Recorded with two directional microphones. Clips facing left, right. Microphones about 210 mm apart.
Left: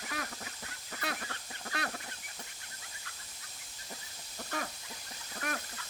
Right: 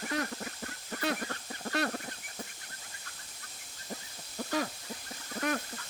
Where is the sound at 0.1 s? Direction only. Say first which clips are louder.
Right 7 dB; 45° right (ahead or behind).